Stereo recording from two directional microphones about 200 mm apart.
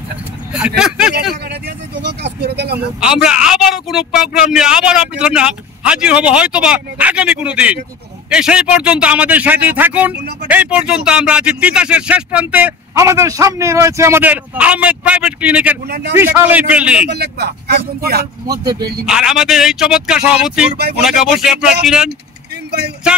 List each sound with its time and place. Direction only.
0.5 s speech: 5° right (ahead or behind)
2.2 s speech: 55° right (ahead or behind)
3.0 s speech: 5° right (ahead or behind)
17.1 s speech: 55° right (ahead or behind)
18.5 s speech: 20° right (ahead or behind)
19.0 s speech: 5° right (ahead or behind)